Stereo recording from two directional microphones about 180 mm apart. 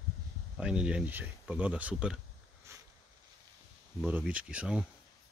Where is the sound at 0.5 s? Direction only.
5° right (ahead or behind).